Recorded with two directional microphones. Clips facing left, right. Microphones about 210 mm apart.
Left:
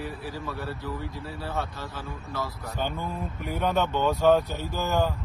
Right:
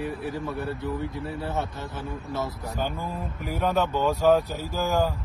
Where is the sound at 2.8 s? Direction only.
5° right (ahead or behind).